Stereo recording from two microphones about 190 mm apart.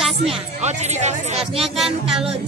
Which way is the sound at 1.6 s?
Centre (ahead or behind).